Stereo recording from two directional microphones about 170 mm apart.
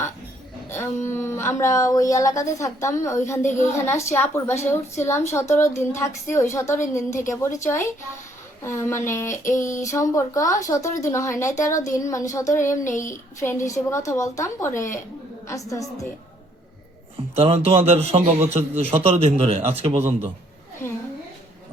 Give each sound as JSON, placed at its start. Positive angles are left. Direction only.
{"t": 0.7, "sound": "a woman's voice", "side_deg": 15}
{"t": 17.3, "sound": "a man's voice", "side_deg": -35}